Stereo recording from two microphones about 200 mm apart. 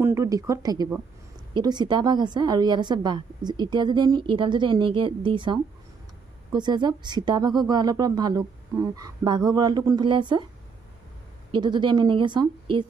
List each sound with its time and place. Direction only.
0.0 s a woman's voice: 15° right (ahead or behind)
11.5 s a woman's voice: 20° right (ahead or behind)